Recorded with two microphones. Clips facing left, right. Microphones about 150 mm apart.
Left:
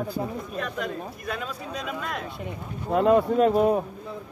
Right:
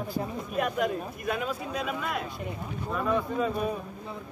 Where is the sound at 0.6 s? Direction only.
10° right (ahead or behind).